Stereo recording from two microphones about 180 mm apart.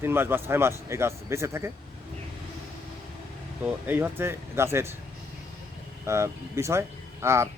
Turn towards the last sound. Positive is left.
turn(degrees=-15)  # may be behind; listen again after turning